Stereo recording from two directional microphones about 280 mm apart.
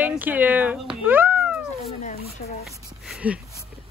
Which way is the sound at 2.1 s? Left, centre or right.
Left.